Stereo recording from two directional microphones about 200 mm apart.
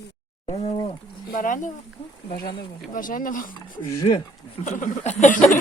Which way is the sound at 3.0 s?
45° left (ahead or behind).